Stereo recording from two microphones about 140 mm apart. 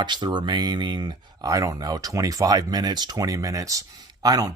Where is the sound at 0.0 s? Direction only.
30° right (ahead or behind).